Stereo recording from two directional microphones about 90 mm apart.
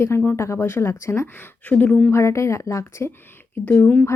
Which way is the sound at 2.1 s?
35° left (ahead or behind).